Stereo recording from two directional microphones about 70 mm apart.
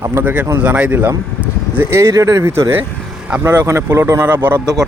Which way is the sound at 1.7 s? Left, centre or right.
Right.